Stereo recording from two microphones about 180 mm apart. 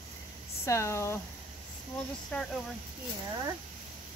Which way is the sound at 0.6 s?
15° left (ahead or behind).